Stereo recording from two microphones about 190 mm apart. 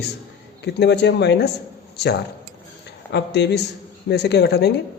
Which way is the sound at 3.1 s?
60° left (ahead or behind).